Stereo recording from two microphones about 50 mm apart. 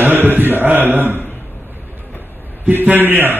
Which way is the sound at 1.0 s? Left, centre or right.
Left.